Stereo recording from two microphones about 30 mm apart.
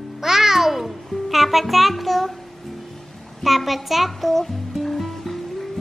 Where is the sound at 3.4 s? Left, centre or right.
Centre.